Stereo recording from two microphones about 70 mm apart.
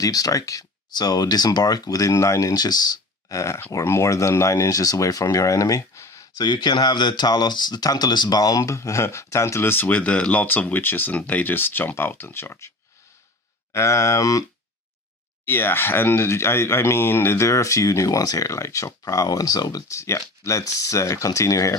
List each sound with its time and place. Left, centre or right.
0.0 s speech: left
0.9 s speech: left
2.6 s speech: left
3.2 s speech: left
6.3 s speech: left
13.7 s speech: left
15.4 s speech: left
19.9 s speech: left